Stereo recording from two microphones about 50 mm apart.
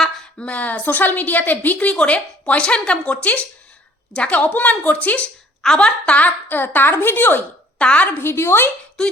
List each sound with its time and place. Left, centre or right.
0.4 s a woman's voice: left
7.8 s a woman's voice: left
8.2 s a woman's voice: left